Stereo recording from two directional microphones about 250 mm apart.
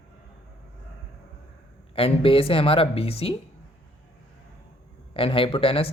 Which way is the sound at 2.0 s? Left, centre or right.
Left.